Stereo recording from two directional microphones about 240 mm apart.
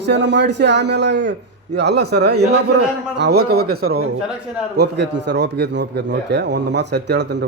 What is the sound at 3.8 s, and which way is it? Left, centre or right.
Speech, right.